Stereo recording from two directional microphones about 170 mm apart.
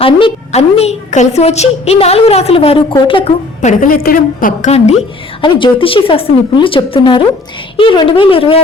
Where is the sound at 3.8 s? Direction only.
60° left (ahead or behind).